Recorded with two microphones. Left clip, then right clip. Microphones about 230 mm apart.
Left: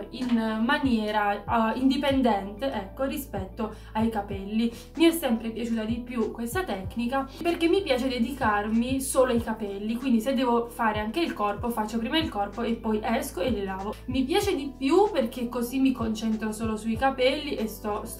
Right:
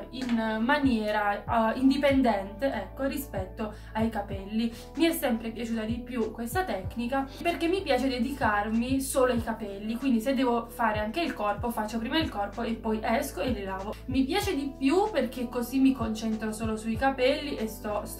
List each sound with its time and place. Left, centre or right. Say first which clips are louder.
0.4 s speech: right 1 dB; centre